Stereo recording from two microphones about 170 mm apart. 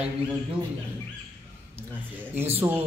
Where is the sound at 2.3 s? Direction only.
15° right (ahead or behind).